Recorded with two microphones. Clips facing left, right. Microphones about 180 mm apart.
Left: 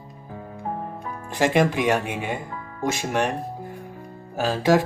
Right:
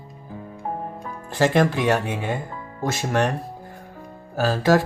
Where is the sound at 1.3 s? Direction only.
15° left (ahead or behind).